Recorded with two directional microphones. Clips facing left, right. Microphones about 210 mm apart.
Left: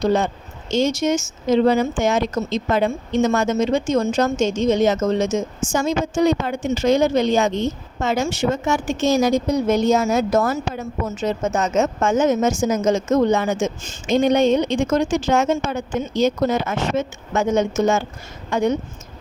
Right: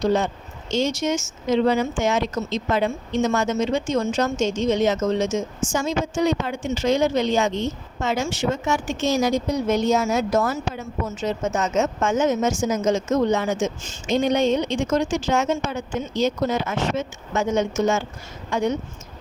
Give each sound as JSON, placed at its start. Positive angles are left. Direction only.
{"t": 0.0, "sound": "speech", "side_deg": 50}
{"t": 8.0, "sound": "speech", "side_deg": 40}